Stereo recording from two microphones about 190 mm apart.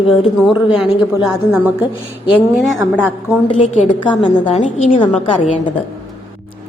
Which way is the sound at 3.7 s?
40° left (ahead or behind).